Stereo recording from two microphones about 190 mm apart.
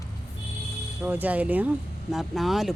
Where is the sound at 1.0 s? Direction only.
10° right (ahead or behind).